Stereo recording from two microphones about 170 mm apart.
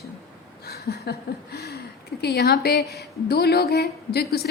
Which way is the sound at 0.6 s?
70° left (ahead or behind).